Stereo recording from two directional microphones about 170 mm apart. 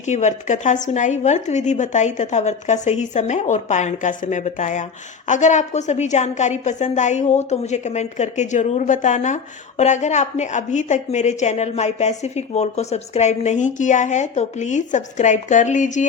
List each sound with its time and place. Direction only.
0.0 s a woman's voice: 45° left (ahead or behind)